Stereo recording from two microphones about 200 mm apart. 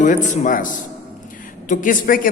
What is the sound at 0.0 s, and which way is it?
A man's voice, 40° left (ahead or behind).